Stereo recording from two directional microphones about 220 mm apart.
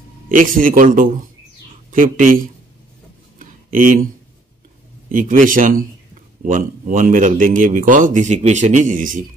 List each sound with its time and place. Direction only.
0.3 s a man's voice: 35° right (ahead or behind)
3.3 s a sound: 35° right (ahead or behind)
5.1 s a man's voice: 35° right (ahead or behind)